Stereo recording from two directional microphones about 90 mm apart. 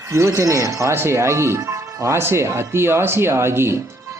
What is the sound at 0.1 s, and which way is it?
A man's voice, 35° right (ahead or behind).